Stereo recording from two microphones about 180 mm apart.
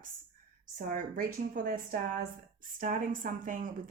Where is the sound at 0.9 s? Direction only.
45° right (ahead or behind).